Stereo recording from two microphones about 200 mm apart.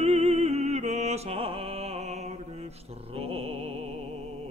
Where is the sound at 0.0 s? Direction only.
35° right (ahead or behind).